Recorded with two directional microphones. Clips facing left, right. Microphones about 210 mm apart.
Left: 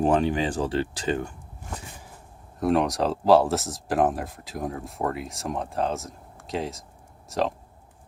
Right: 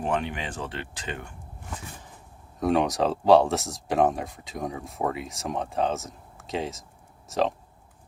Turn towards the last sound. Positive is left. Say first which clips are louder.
# right 1 dB
turn(degrees=0)  # may be behind; listen again after turning